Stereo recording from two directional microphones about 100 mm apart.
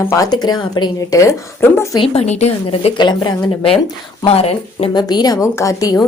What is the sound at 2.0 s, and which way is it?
Speech, 85° left.